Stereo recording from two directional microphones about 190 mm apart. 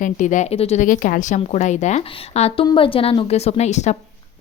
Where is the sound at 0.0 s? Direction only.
40° left (ahead or behind).